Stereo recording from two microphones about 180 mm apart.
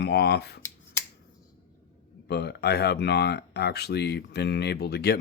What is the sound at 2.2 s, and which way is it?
Speech, 65° left (ahead or behind).